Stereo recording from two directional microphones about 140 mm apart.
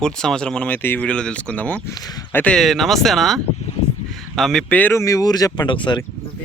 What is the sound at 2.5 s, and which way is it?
Speech, centre (ahead or behind).